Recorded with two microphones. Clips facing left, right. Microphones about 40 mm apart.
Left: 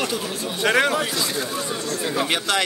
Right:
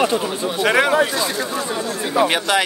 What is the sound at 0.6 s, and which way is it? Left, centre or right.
Speech, centre.